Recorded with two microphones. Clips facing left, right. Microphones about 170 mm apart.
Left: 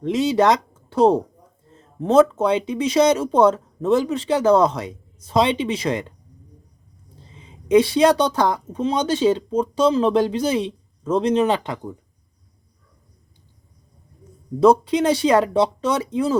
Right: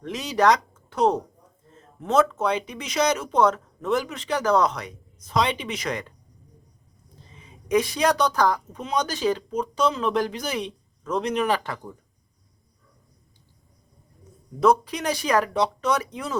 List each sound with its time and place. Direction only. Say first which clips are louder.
0.0 s speech: left 4 dB; 25° left (ahead or behind)
7.3 s speech: left 7 dB; 25° left (ahead or behind)
14.6 s speech: left 6 dB; 30° left (ahead or behind)